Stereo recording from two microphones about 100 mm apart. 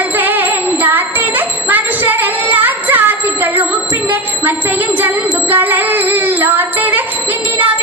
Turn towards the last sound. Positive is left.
turn(degrees=-15)  # may be behind; listen again after turning